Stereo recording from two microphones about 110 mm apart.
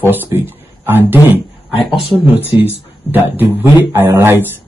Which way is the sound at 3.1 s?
20° right (ahead or behind).